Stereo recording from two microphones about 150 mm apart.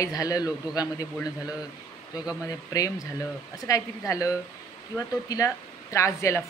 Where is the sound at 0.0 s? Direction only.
25° left (ahead or behind).